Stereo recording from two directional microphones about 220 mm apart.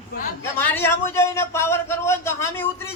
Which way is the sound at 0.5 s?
10° left (ahead or behind).